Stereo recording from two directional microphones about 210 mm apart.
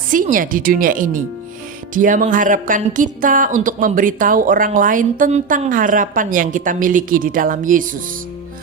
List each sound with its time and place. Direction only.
0.1 s speech: 40° right (ahead or behind)